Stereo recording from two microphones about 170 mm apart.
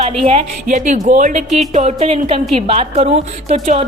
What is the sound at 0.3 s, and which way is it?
A woman's voice, 40° right (ahead or behind).